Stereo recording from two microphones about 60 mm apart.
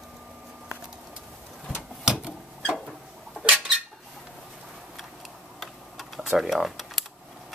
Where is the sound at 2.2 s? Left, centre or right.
Centre.